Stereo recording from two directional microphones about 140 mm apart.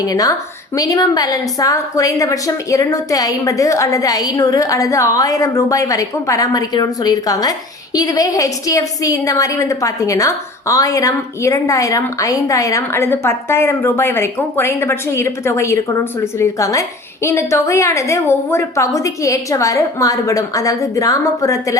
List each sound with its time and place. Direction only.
0.0 s a woman's voice: 25° left (ahead or behind)